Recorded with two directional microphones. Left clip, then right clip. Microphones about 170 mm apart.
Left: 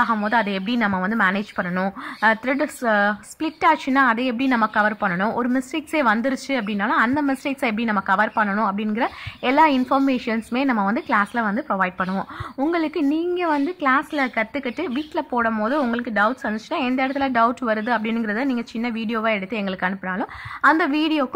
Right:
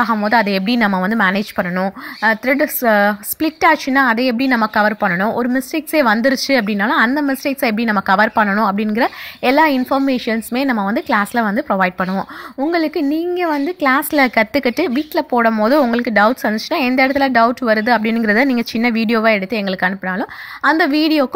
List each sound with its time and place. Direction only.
0.0 s speech: 30° right (ahead or behind)
1.8 s speech: 15° right (ahead or behind); by 7.1 s 35° right (ahead or behind)
7.1 s speech: 25° right (ahead or behind)